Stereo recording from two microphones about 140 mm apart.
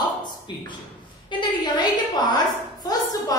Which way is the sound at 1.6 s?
30° left (ahead or behind).